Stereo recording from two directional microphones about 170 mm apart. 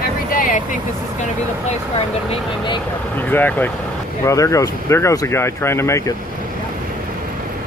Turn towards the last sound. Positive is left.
turn(degrees=15)  # may be behind; listen again after turning